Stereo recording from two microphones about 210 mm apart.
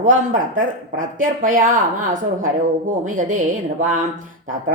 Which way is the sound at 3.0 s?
35° right (ahead or behind).